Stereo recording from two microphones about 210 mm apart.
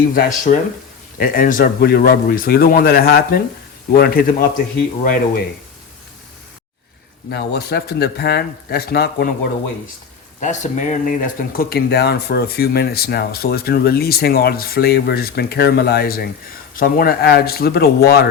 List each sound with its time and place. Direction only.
0.1 s speech: 40° left (ahead or behind)
7.3 s speech: 50° left (ahead or behind)
10.4 s speech: 35° left (ahead or behind)